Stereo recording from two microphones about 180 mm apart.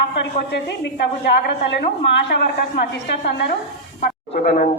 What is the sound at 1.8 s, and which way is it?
Speech, 60° left (ahead or behind).